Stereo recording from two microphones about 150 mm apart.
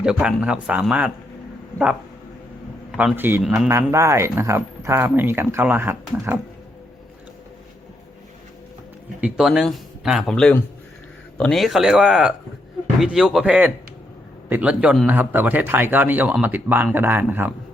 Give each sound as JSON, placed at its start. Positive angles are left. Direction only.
{"t": 0.0, "sound": "speech", "side_deg": -5}
{"t": 3.0, "sound": "speech", "side_deg": -10}
{"t": 3.4, "sound": "speech", "side_deg": -5}
{"t": 3.7, "sound": "speech", "side_deg": -20}
{"t": 9.2, "sound": "speech", "side_deg": 0}